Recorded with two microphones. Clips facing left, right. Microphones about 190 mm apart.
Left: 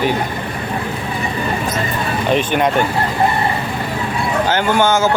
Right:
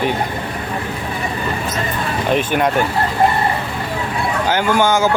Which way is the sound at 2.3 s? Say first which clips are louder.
Left 1 dB; 5° right (ahead or behind).